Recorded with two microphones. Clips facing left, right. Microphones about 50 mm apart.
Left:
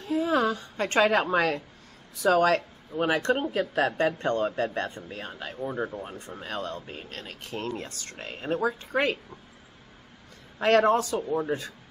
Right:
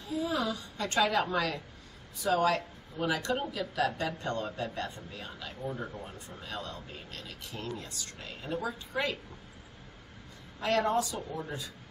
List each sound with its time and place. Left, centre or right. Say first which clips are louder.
0.0 s a woman's voice: left 7 dB; left
2.2 s speech: left 6 dB; left
10.6 s speech: left 7 dB; left